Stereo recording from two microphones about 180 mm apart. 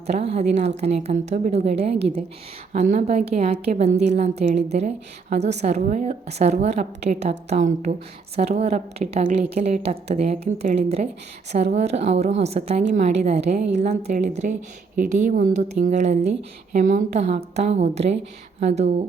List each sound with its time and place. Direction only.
0.1 s a woman's voice: 35° right (ahead or behind)